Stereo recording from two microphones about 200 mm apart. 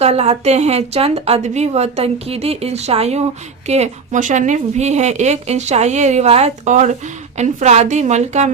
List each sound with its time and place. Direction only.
0.0 s a woman's voice: 30° right (ahead or behind)